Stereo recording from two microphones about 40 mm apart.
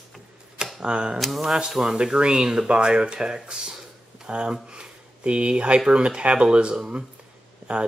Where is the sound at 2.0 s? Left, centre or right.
Right.